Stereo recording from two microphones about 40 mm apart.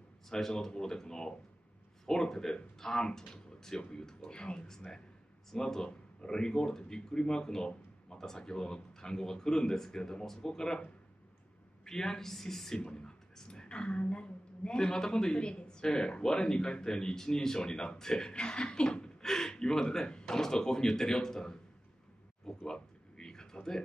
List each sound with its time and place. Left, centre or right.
0.3 s speech: centre
11.8 s speech: centre
12.8 s a woman's voice: left
22.6 s a sound: centre